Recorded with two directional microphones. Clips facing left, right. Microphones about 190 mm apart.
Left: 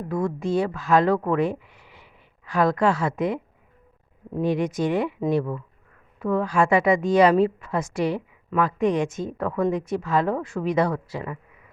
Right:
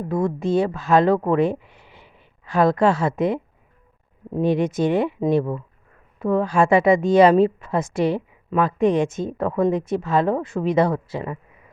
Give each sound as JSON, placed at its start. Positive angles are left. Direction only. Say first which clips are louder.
{"t": 0.1, "sound": "a woman's voice", "louder": "right 3 dB", "side_deg": -25}